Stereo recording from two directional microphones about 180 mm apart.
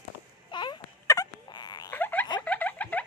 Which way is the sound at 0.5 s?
25° left (ahead or behind).